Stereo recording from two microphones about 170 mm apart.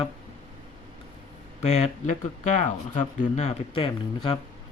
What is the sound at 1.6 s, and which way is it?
Speech, 40° left (ahead or behind).